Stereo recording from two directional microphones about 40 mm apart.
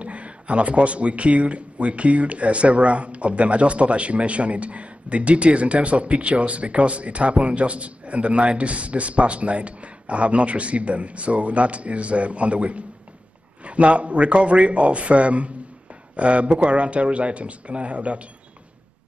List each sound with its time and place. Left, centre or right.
0.0 s speech: right